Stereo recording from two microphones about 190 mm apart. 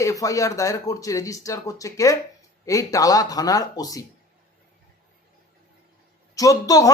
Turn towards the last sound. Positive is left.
turn(degrees=20)  # may be behind; listen again after turning